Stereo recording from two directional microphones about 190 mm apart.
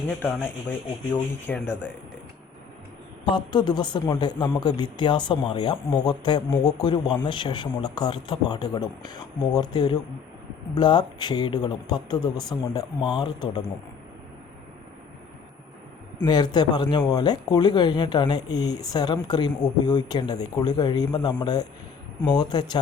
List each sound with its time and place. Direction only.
0.1 s speech: 5° left (ahead or behind)
1.5 s speech: 5° left (ahead or behind)
3.2 s speech: 25° left (ahead or behind)
16.2 s speech: 20° left (ahead or behind)